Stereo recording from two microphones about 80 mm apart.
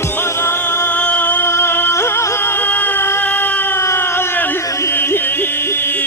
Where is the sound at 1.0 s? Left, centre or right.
Centre; by 2.2 s left.